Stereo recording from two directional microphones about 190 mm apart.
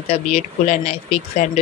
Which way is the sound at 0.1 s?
35° left (ahead or behind).